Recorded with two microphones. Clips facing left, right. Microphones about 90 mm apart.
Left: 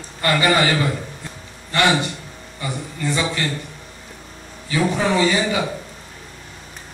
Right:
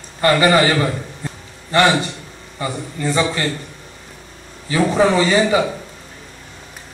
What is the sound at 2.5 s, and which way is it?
Speech, 35° right (ahead or behind).